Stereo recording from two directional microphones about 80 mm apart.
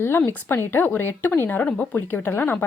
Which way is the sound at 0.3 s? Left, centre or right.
Left.